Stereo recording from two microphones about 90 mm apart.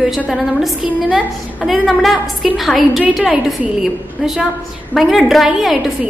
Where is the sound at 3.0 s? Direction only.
10° right (ahead or behind).